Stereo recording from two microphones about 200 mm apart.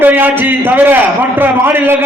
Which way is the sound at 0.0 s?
10° right (ahead or behind).